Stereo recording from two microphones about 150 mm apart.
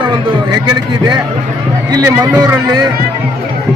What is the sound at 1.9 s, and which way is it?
Speech, 25° right (ahead or behind).